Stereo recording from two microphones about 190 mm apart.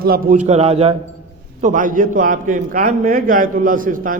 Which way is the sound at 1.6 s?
45° right (ahead or behind).